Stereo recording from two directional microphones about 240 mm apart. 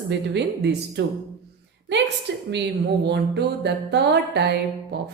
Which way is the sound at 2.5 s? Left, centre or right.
Right.